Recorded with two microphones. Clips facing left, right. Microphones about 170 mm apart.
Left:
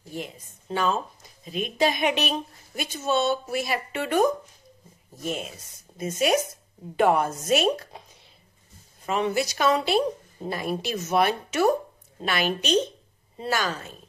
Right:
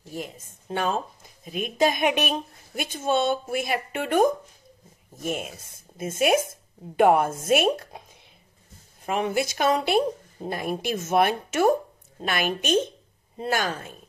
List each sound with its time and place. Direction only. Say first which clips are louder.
0.1 s speech: even; 45° right (ahead or behind)